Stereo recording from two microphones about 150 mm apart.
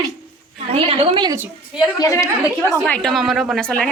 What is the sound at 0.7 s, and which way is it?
Speech, 35° right (ahead or behind).